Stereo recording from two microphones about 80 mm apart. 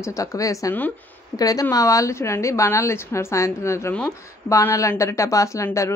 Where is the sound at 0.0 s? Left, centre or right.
Left.